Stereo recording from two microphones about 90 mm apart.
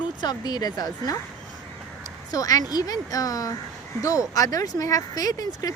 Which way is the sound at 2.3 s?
40° left (ahead or behind).